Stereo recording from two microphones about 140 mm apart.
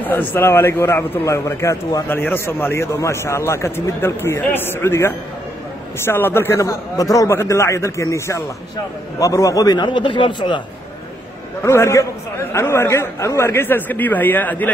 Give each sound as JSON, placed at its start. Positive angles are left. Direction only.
{"t": 0.0, "sound": "a man's voice", "side_deg": 10}
{"t": 11.6, "sound": "a man's voice", "side_deg": 20}